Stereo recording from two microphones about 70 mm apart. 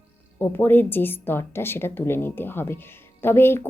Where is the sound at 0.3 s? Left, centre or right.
Left.